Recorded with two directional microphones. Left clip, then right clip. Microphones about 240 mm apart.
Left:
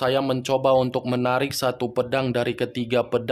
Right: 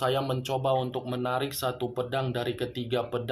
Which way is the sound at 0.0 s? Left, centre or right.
Left.